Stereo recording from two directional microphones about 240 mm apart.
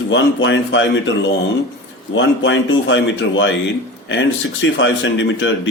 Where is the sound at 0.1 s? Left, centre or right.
Left.